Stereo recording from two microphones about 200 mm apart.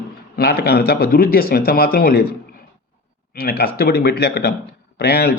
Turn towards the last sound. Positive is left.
turn(degrees=55)  # may be behind; listen again after turning